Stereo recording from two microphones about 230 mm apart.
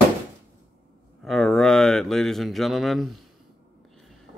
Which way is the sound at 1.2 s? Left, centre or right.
Centre.